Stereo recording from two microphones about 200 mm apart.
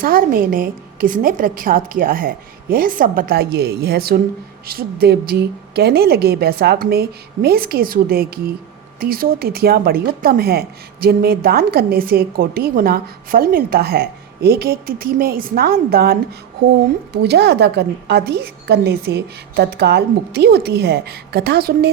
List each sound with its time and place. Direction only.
0.0 s speech: 45° right (ahead or behind)
17.2 s a woman's voice: 55° right (ahead or behind)